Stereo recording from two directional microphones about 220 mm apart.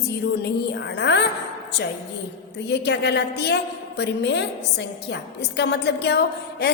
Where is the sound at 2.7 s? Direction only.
50° left (ahead or behind).